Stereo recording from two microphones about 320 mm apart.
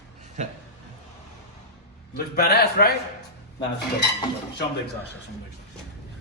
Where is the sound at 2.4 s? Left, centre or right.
Left.